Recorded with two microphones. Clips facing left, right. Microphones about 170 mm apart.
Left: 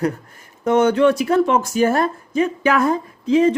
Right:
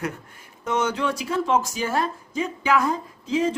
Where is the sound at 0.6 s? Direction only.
55° left (ahead or behind).